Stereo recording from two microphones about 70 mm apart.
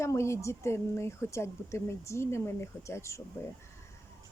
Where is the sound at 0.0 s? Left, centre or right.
Left.